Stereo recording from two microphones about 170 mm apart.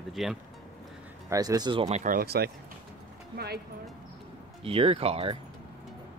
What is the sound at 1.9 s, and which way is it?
Speech, 50° right (ahead or behind).